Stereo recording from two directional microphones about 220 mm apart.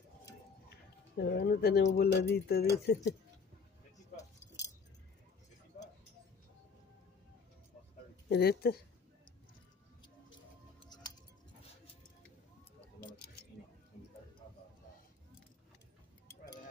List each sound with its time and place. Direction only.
1.1 s speech: 50° left (ahead or behind)
8.3 s speech: 45° left (ahead or behind)
10.9 s keys jangling: 20° left (ahead or behind)